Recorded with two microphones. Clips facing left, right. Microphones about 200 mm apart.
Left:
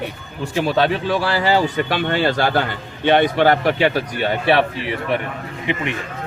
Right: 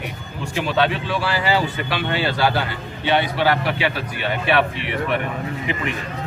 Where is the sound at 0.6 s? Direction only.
40° left (ahead or behind).